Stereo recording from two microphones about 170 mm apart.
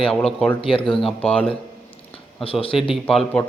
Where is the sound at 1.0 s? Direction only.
5° left (ahead or behind).